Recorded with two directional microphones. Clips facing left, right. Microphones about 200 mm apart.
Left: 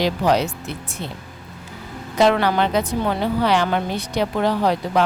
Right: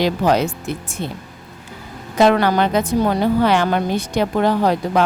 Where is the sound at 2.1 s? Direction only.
50° right (ahead or behind).